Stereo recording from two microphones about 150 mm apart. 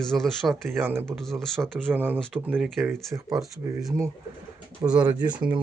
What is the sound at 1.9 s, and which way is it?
Speech, 15° right (ahead or behind).